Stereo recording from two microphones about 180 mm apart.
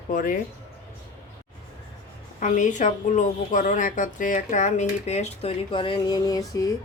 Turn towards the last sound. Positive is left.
turn(degrees=20)  # may be behind; listen again after turning